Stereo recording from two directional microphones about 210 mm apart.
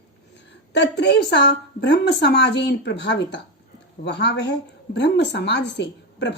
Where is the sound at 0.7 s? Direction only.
55° left (ahead or behind).